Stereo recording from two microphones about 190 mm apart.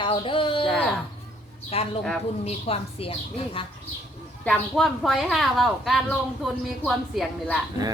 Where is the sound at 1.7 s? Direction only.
30° left (ahead or behind).